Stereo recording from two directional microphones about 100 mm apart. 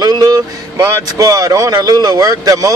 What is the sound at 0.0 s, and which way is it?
Speech, 40° right (ahead or behind).